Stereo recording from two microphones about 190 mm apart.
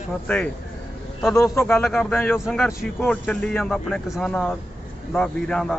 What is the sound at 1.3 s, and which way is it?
Speech, 15° left (ahead or behind).